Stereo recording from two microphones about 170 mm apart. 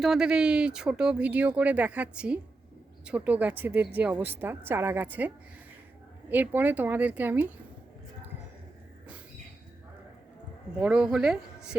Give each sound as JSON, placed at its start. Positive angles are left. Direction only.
{"t": 0.0, "sound": "a woman's voice", "side_deg": -5}
{"t": 10.8, "sound": "speech", "side_deg": -5}